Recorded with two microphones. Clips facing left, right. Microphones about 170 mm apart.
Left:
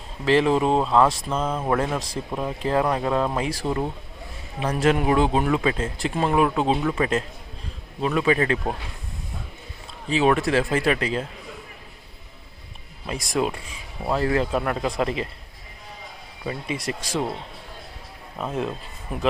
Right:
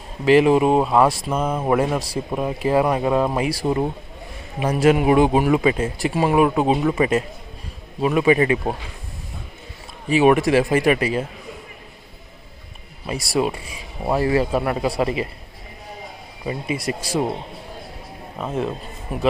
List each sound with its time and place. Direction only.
0.3 s speech: 10° right (ahead or behind)
10.1 s speech: 10° right (ahead or behind)
13.1 s speech: 10° right (ahead or behind)
16.4 s speech: 10° right (ahead or behind)
18.3 s speech: centre (ahead or behind)